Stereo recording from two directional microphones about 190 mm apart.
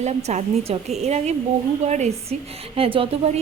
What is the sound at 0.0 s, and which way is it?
A woman's voice, 35° right (ahead or behind).